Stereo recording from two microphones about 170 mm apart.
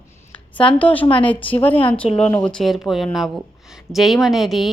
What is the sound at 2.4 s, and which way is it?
A woman's voice, 5° left (ahead or behind).